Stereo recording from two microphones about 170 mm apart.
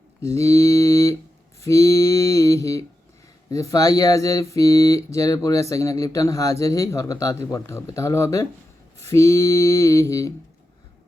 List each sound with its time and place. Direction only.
0.3 s mantra: 20° left (ahead or behind)
3.5 s speech: 20° left (ahead or behind)